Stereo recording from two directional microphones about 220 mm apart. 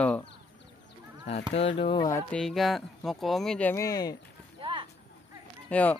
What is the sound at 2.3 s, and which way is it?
Speech, centre (ahead or behind).